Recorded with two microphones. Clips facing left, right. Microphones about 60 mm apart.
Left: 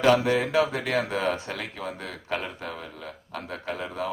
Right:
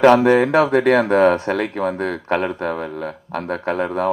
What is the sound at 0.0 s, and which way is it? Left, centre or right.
Speech, right.